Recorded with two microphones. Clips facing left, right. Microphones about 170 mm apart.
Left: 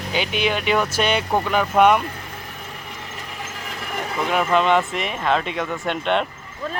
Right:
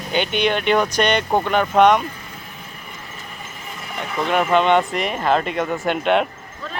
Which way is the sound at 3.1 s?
90° left.